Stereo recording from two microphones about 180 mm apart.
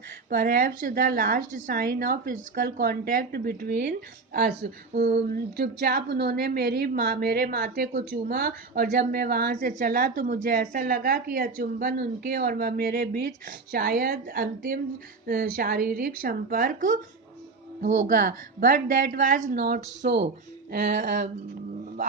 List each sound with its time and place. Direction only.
0.3 s a woman's voice: 50° right (ahead or behind); by 20.3 s 70° right (ahead or behind)
20.7 s a woman's voice: 60° right (ahead or behind)